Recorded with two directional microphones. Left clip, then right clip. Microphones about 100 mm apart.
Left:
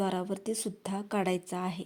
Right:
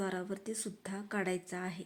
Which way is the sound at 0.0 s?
50° left (ahead or behind).